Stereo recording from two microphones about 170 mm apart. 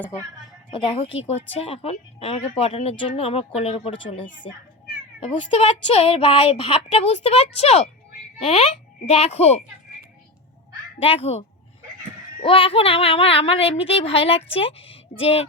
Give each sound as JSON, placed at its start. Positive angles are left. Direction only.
{"t": 0.7, "sound": "speech", "side_deg": 35}
{"t": 11.0, "sound": "speech", "side_deg": 35}